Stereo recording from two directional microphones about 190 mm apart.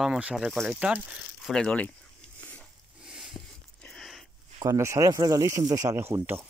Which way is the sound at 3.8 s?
5° left (ahead or behind).